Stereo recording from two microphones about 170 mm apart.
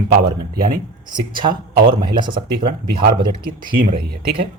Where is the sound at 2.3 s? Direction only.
60° right (ahead or behind).